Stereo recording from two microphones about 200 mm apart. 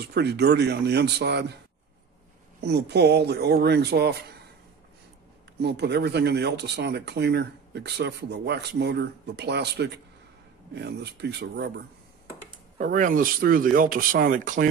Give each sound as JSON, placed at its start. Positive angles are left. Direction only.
{"t": 0.0, "sound": "speech", "side_deg": -55}
{"t": 2.6, "sound": "speech", "side_deg": -55}
{"t": 5.6, "sound": "speech", "side_deg": -55}
{"t": 12.7, "sound": "speech", "side_deg": -40}